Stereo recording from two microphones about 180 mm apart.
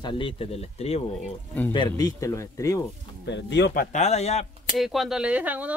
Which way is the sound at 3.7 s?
45° left (ahead or behind).